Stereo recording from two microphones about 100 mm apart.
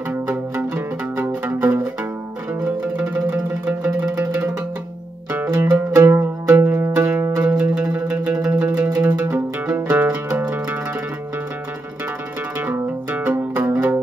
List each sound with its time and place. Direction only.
0.3 s music: 20° right (ahead or behind)
3.0 s music: 20° right (ahead or behind)
5.6 s music: 25° right (ahead or behind)
12.5 s music: 20° right (ahead or behind)